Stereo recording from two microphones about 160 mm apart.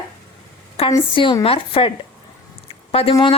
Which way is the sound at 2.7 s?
35° left (ahead or behind).